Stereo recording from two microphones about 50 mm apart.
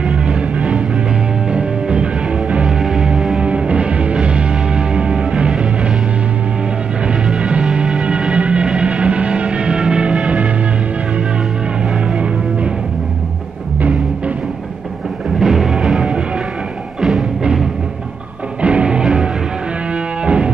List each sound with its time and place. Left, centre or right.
0.0 s music: centre
2.6 s music: centre
3.3 s music: right
7.3 s music: right
13.7 s music: right
15.3 s music: centre
17.4 s music: centre
20.2 s music: right